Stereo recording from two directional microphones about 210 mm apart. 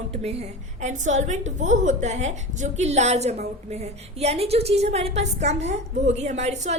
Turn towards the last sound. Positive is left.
turn(degrees=-30)  # may be behind; listen again after turning